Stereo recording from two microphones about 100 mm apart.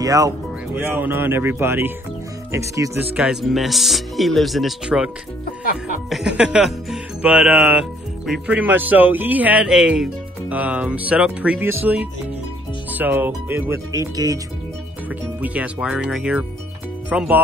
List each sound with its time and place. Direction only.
0.0 s speech: 35° right (ahead or behind)
0.7 s speech: 20° right (ahead or behind)
3.0 s speech: 15° right (ahead or behind)
3.5 s speech: centre (ahead or behind); by 13.7 s 20° right (ahead or behind)
13.9 s speech: 35° right (ahead or behind)
15.0 s speech: 15° right (ahead or behind)